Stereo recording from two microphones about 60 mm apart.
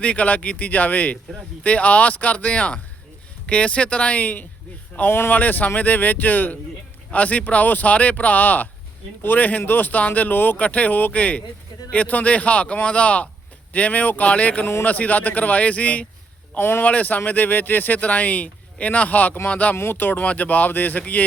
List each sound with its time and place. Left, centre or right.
0.0 s speech: left
16.6 s speech: left
16.8 s speech: left
19.7 s speech: left